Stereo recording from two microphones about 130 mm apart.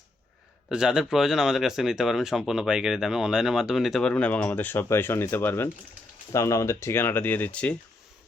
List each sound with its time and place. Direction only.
0.7 s speech: 5° right (ahead or behind)
4.1 s speech: 10° left (ahead or behind)